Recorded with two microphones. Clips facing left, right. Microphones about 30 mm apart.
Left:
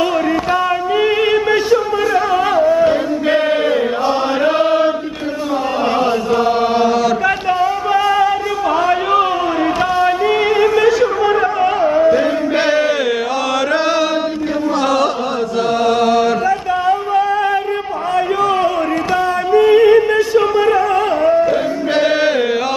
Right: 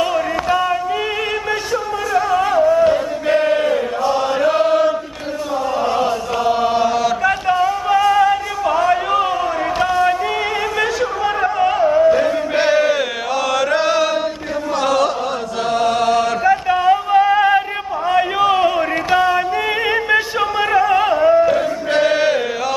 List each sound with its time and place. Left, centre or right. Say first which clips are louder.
0.0 s a sound: left 3 dB; centre
1.5 s music: left 6 dB; centre
6.4 s chant: right 1 dB; left
7.0 s music: left 2 dB; centre
9.8 s a sound: right 1 dB; centre
13.6 s chant: left 1 dB; centre
15.8 s mantra: left 2 dB; centre
16.9 s music: right 3 dB; centre
18.1 s a sound: even; centre
21.1 s music: right 1 dB; centre
21.5 s music: left 1 dB; centre